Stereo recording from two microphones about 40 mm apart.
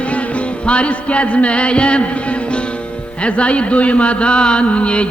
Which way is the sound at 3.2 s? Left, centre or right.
Left.